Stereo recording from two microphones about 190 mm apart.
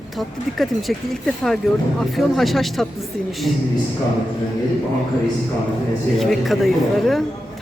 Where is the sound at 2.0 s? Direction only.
Centre (ahead or behind).